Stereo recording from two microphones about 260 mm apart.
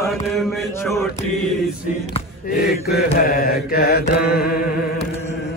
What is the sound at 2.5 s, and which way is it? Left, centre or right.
Mantra, left.